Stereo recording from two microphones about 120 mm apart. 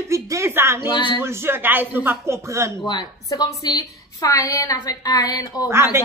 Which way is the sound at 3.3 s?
30° left (ahead or behind).